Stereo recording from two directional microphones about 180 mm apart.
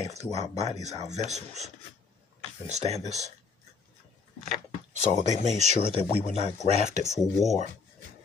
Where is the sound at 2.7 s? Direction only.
35° right (ahead or behind).